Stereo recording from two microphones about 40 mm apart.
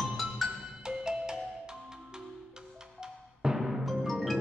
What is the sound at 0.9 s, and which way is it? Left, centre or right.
Music, centre.